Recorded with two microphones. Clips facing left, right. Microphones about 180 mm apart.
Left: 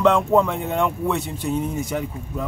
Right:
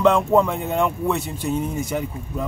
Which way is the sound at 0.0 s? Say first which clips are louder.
Even; centre (ahead or behind).